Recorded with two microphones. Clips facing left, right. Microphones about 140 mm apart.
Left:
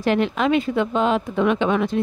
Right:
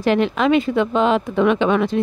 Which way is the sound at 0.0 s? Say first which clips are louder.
Right 3 dB; 90° right.